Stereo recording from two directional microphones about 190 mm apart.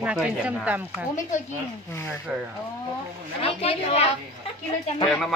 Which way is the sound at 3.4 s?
30° left (ahead or behind).